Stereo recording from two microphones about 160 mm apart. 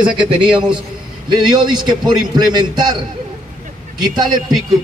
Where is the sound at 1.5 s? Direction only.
25° right (ahead or behind).